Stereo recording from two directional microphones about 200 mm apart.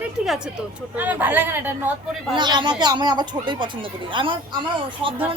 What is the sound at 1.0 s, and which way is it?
Speech, 10° right (ahead or behind).